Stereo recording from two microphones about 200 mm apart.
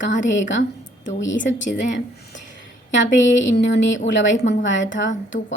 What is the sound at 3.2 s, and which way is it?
Speech, 60° left (ahead or behind).